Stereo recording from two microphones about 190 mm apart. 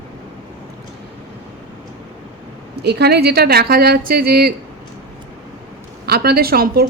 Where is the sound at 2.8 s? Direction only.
60° right (ahead or behind).